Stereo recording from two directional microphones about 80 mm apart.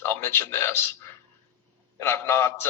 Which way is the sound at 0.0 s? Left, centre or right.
Left.